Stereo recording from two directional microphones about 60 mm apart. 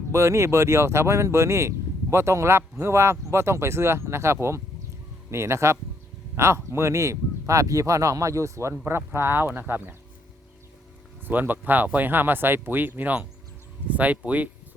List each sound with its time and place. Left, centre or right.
0.1 s speech: right
8.7 s speech: right
11.3 s speech: right